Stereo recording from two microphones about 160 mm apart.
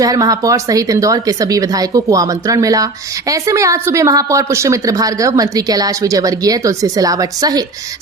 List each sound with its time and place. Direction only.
0.0 s a woman's voice: 20° right (ahead or behind)